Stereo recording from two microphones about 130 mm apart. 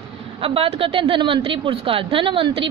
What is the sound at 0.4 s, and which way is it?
A woman's voice, 45° right (ahead or behind).